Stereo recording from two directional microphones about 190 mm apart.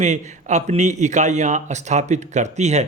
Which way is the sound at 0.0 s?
35° right (ahead or behind).